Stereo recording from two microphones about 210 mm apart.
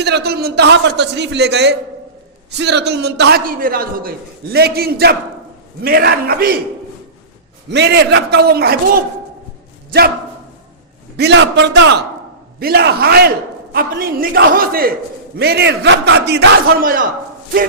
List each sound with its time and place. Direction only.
0.0 s a man's voice: 50° right (ahead or behind)
7.7 s a man's voice: 55° right (ahead or behind)
11.2 s a man's voice: 60° right (ahead or behind); by 17.1 s 40° right (ahead or behind)